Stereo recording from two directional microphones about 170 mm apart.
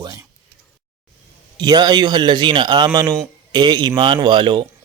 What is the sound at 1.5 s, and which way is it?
A man's voice, 25° right (ahead or behind).